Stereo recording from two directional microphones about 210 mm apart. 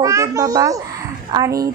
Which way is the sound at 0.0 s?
15° right (ahead or behind).